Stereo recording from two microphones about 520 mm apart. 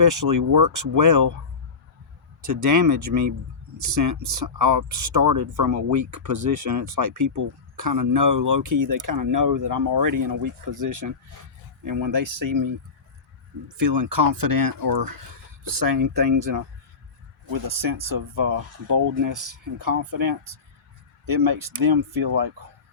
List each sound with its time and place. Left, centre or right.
0.0 s speech: right
2.5 s speech: right
18.1 s speech: right
21.2 s speech: right